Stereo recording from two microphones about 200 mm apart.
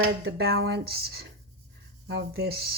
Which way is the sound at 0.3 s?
55° right (ahead or behind).